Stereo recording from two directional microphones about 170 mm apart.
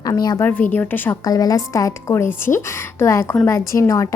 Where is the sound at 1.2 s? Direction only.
20° left (ahead or behind).